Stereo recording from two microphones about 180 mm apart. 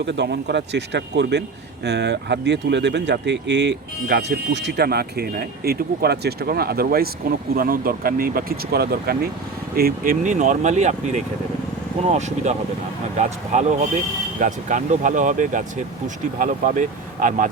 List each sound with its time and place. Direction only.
0.0 s speech: 70° right (ahead or behind); by 17.5 s 45° right (ahead or behind)